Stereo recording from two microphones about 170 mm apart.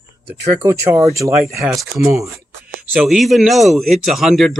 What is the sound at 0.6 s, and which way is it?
Speech, 15° right (ahead or behind).